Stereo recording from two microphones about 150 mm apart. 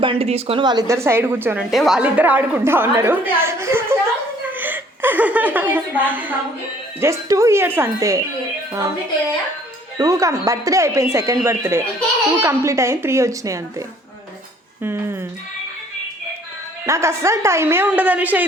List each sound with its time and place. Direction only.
0.0 s speech: 40° right (ahead or behind); by 1.6 s 15° right (ahead or behind)
1.7 s a woman's voice: centre (ahead or behind); by 8.2 s 20° right (ahead or behind)
10.0 s speech: 20° right (ahead or behind)
16.8 s a woman's voice: 20° right (ahead or behind)